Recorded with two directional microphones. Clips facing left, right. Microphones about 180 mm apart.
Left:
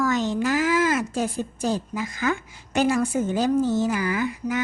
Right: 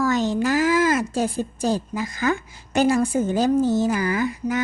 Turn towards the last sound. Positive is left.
turn(degrees=-40)  # may be behind; listen again after turning